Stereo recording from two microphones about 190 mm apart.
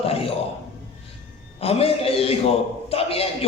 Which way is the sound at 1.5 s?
30° left (ahead or behind).